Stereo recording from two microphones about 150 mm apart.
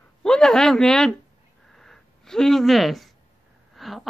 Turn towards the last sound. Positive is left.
turn(degrees=0)  # may be behind; listen again after turning